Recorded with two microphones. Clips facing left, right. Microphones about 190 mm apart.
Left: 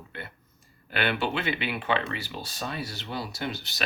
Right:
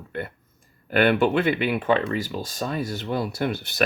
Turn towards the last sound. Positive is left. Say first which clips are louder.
# right 7 dB
turn(degrees=-55)  # may be behind; listen again after turning